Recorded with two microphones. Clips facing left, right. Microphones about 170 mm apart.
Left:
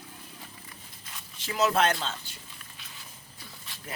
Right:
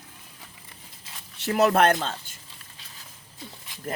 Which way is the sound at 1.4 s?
60° right (ahead or behind).